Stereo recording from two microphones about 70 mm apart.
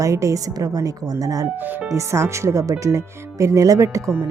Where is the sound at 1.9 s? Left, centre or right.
Right.